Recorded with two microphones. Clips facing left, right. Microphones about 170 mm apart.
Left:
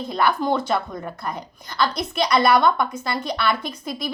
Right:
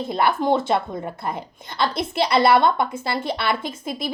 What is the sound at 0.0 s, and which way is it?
Speech, 25° right (ahead or behind).